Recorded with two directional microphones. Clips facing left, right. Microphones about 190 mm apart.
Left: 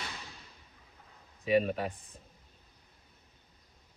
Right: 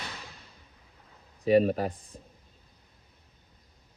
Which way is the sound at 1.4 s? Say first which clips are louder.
Right 5 dB; 35° right (ahead or behind).